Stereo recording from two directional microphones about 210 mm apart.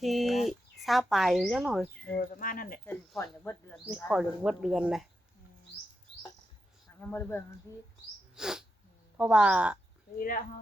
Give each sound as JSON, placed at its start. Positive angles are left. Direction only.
{"t": 0.0, "sound": "speech", "side_deg": 0}
{"t": 2.3, "sound": "speech", "side_deg": 40}
{"t": 2.8, "sound": "speech", "side_deg": 10}
{"t": 4.1, "sound": "speech", "side_deg": -5}
{"t": 7.0, "sound": "speech", "side_deg": 10}
{"t": 8.4, "sound": "sneeze", "side_deg": -5}
{"t": 9.1, "sound": "speech", "side_deg": -5}
{"t": 10.2, "sound": "speech", "side_deg": 40}